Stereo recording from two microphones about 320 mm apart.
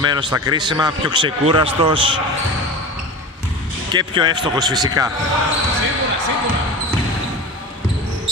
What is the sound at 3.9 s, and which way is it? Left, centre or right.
A man's voice, centre.